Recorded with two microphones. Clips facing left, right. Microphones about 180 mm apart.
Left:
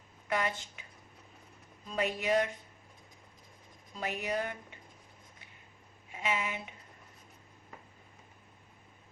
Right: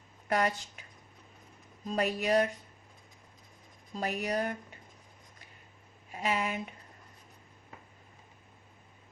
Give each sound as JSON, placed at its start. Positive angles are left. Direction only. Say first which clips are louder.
{"t": 0.3, "sound": "speech", "louder": "right 4 dB", "side_deg": -40}
{"t": 1.8, "sound": "speech", "louder": "right 3 dB", "side_deg": -40}
{"t": 3.9, "sound": "speech", "louder": "right 3 dB", "side_deg": -40}
{"t": 6.1, "sound": "speech", "louder": "right 3 dB", "side_deg": -40}